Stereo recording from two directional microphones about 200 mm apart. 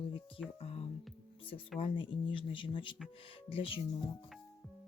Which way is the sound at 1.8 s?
25° left (ahead or behind).